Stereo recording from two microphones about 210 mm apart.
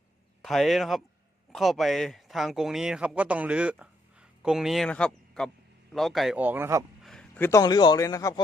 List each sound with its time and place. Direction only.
0.4 s speech: centre (ahead or behind)
7.0 s speech: 5° left (ahead or behind)